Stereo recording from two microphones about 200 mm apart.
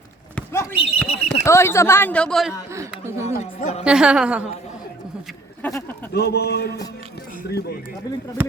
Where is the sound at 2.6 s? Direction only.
15° right (ahead or behind).